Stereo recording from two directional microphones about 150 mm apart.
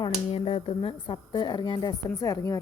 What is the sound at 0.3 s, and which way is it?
A woman's voice, 40° left (ahead or behind).